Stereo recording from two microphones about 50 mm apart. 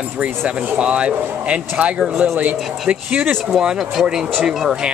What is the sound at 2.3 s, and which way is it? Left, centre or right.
Speech, right.